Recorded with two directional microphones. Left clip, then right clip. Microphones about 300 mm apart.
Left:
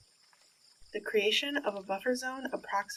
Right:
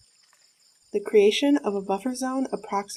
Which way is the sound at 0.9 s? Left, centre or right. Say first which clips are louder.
Right 10 dB; right.